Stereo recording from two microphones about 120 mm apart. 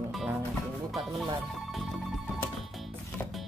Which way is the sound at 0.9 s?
Centre (ahead or behind).